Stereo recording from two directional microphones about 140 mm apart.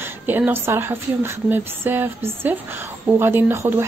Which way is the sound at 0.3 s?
15° right (ahead or behind).